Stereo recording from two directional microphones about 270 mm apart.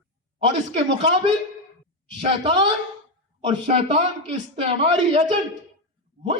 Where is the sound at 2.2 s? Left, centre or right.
Centre.